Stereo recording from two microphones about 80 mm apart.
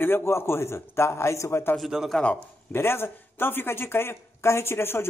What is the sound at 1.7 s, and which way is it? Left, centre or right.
Speech, centre.